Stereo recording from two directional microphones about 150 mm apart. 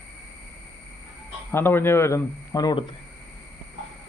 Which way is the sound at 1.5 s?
15° left (ahead or behind).